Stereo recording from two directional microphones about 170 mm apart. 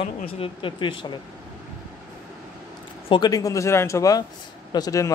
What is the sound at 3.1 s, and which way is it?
Speech, 25° left (ahead or behind).